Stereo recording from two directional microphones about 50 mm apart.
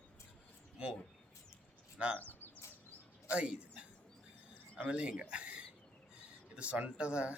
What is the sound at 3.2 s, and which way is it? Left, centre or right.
Speech, right.